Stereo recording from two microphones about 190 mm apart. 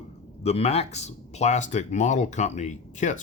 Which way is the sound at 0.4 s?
35° left (ahead or behind).